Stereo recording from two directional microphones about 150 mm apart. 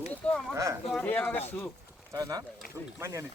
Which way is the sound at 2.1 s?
25° right (ahead or behind).